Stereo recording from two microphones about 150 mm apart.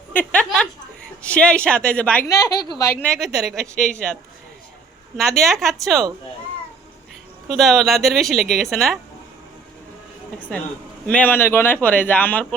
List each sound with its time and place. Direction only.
0.1 s a sound: 10° left (ahead or behind)
1.2 s speech: 5° left (ahead or behind)
2.2 s a woman's voice: 25° left (ahead or behind)
3.0 s a woman's voice: centre (ahead or behind)
7.5 s a woman's voice: centre (ahead or behind)
11.0 s speech: 10° left (ahead or behind)